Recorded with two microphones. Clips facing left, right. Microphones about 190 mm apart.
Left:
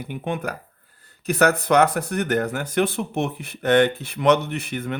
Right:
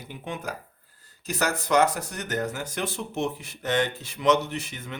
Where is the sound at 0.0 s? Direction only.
60° left (ahead or behind).